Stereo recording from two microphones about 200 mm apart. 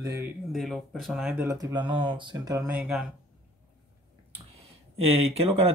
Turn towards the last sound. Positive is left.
turn(degrees=-30)  # may be behind; listen again after turning